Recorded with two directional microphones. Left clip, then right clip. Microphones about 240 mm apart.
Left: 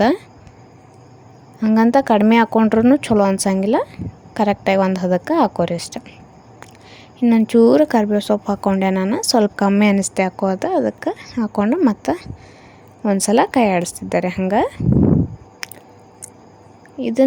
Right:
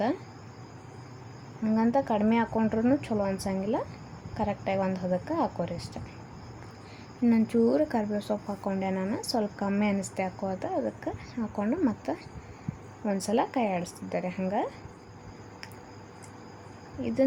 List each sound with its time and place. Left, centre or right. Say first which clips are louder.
1.6 s speech: left 12 dB; left
7.2 s speech: left 12 dB; left
15.6 s biting: left 16 dB; left
17.0 s speech: left 11 dB; left